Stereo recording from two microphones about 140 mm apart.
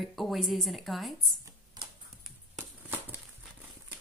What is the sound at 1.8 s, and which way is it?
Typing, 30° right (ahead or behind).